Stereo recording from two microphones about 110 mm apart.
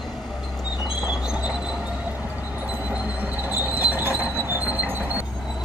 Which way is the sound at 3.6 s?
15° right (ahead or behind).